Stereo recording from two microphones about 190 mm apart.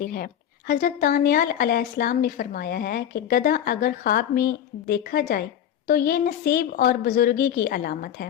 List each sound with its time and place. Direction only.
0.0 s a woman's voice: 50° left (ahead or behind)